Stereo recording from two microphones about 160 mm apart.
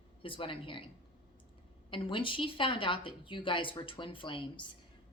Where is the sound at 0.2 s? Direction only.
35° left (ahead or behind).